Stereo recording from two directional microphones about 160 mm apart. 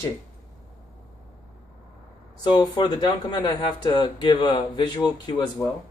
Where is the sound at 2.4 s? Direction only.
30° left (ahead or behind).